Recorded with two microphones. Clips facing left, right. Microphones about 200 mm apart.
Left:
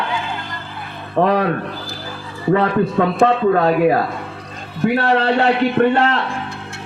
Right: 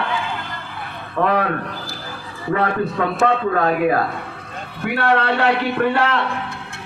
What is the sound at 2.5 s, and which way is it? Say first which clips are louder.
A man's voice: left 4 dB; 25° left (ahead or behind).